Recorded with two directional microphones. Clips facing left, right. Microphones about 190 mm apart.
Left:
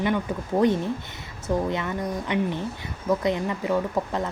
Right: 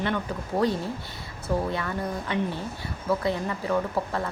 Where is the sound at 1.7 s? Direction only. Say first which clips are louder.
Left 2 dB; 20° left (ahead or behind).